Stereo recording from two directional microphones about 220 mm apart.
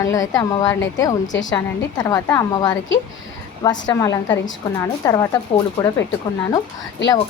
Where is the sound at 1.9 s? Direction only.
15° left (ahead or behind).